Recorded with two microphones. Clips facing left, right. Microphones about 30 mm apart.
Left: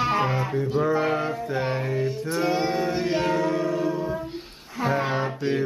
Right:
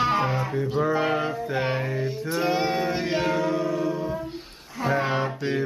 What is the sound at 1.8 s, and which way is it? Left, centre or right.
Speech, centre.